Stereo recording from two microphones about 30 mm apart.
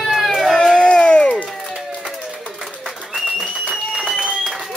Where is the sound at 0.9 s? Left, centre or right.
Left.